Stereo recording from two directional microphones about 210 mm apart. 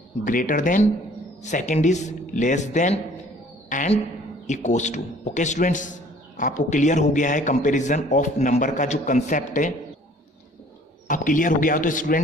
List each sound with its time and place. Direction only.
0.2 s a man's voice: 40° left (ahead or behind)
11.1 s a man's voice: 40° left (ahead or behind)